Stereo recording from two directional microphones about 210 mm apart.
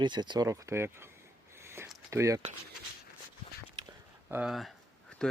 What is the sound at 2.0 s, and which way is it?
Speech, 15° right (ahead or behind).